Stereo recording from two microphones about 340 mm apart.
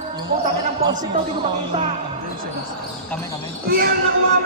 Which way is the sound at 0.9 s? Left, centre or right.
Centre.